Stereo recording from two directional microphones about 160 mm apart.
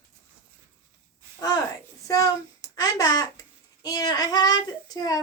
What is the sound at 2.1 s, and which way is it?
A woman's voice, 20° left (ahead or behind).